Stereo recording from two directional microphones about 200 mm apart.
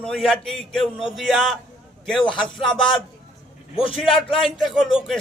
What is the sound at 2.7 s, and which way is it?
Speech, 25° left (ahead or behind).